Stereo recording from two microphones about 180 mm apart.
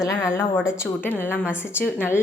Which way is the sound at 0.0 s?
15° left (ahead or behind).